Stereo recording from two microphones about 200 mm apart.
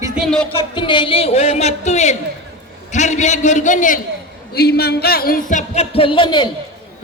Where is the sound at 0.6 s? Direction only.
25° left (ahead or behind); by 4.0 s 40° left (ahead or behind).